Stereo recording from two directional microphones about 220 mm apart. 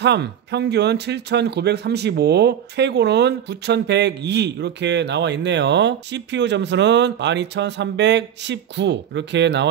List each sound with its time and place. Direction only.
0.0 s speech: 50° right (ahead or behind)